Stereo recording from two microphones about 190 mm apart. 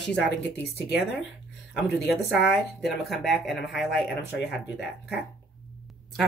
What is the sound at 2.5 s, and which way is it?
A woman's voice, centre (ahead or behind).